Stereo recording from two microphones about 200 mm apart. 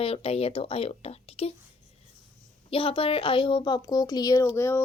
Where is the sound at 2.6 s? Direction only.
30° left (ahead or behind).